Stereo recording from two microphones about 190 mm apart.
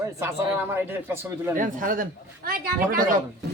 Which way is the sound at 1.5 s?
45° right (ahead or behind).